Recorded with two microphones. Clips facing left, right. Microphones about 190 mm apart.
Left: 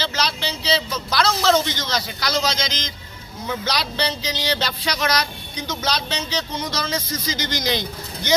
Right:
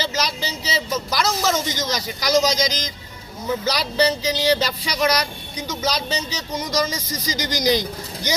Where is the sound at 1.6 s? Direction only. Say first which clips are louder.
Right 2 dB; 65° left (ahead or behind).